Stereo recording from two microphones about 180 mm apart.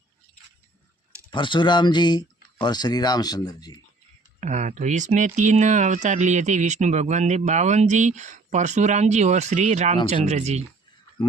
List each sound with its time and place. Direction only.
1.3 s speech: 25° left (ahead or behind)
4.4 s speech: 40° right (ahead or behind)